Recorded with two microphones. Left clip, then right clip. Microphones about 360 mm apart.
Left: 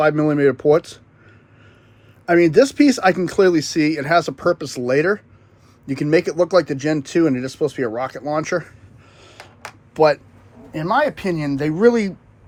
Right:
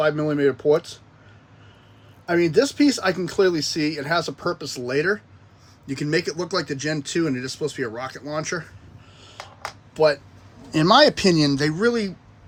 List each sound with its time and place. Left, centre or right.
0.0 s speech: centre
2.2 s speech: centre
9.9 s speech: centre
10.7 s speech: centre
11.8 s speech: centre